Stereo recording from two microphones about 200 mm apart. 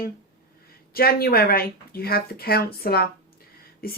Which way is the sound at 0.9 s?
50° left (ahead or behind).